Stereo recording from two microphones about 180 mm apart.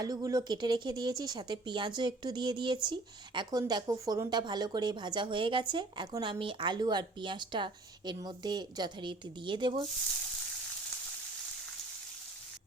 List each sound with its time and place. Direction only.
0.0 s speech: 20° right (ahead or behind)